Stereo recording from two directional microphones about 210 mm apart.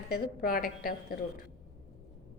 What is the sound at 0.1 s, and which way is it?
Speech, 45° left (ahead or behind).